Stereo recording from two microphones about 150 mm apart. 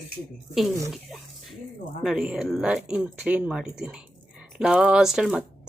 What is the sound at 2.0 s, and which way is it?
Speech, 5° right (ahead or behind).